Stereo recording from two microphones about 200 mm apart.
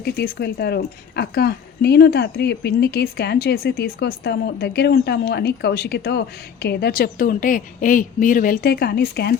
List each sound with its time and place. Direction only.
0.0 s speech: 50° left (ahead or behind)